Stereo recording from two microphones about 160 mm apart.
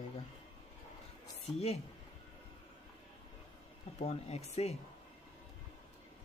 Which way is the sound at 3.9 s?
40° left (ahead or behind).